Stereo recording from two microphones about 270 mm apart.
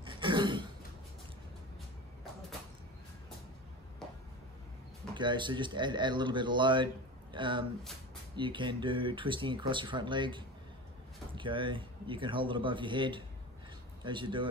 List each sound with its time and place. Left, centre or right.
0.0 s throat clearing: centre
4.0 s a sound: centre
5.1 s speech: centre